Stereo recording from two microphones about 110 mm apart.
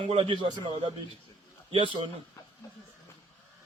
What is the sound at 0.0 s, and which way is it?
Speech, 50° right (ahead or behind).